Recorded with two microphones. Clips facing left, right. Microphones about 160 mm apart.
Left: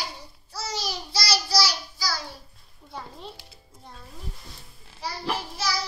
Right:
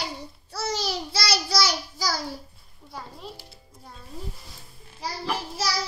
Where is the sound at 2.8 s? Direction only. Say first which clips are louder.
Even; centre (ahead or behind).